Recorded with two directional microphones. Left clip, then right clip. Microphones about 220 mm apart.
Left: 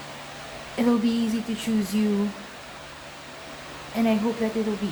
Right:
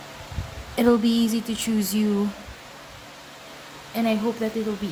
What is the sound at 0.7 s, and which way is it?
Speech, 45° right (ahead or behind).